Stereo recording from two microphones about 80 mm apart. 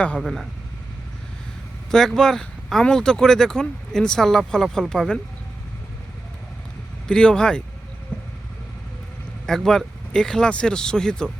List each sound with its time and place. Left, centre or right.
0.2 s speech: centre
1.9 s speech: centre
7.1 s speech: centre
8.1 s vehicle: left
9.5 s speech: centre